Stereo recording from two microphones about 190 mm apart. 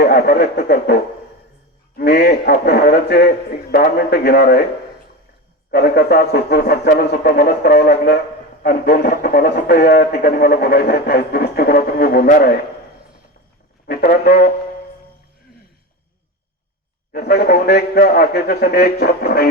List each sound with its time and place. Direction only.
0.0 s speech: 55° left (ahead or behind)
2.0 s speech: 60° left (ahead or behind)
5.7 s speech: 60° left (ahead or behind)
13.8 s speech: 50° left (ahead or behind)
17.1 s speech: 55° left (ahead or behind)